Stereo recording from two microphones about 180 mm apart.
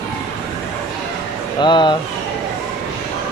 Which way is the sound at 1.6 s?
25° left (ahead or behind).